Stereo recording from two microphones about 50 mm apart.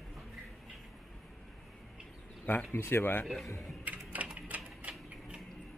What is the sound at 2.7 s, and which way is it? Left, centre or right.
Speech, left.